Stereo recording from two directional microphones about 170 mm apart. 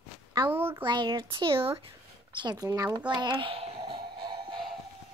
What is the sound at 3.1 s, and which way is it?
Music, 25° right (ahead or behind).